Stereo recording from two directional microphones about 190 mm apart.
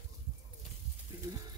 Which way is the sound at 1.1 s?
15° right (ahead or behind).